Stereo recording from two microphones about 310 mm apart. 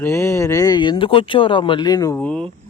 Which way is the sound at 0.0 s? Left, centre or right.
Centre.